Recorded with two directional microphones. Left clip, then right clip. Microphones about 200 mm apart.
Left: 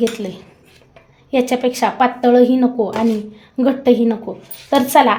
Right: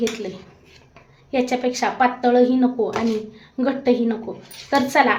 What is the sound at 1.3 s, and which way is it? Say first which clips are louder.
A woman's voice: left 5 dB; 35° left (ahead or behind).